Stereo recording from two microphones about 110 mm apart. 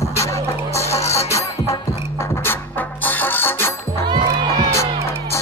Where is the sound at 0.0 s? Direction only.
25° left (ahead or behind).